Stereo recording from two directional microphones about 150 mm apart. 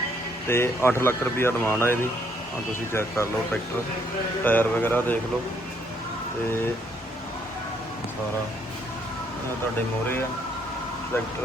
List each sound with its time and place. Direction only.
0.4 s speech: 15° left (ahead or behind)